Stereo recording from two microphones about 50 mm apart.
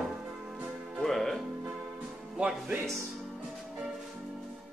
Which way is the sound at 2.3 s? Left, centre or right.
Right.